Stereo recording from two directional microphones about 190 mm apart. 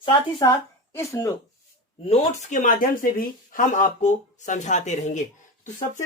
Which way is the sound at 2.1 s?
45° left (ahead or behind).